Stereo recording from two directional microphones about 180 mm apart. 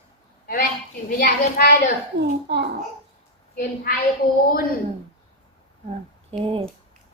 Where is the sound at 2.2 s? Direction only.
70° right (ahead or behind).